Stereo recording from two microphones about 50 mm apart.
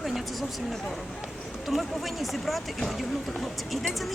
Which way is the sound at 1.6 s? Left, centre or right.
Centre.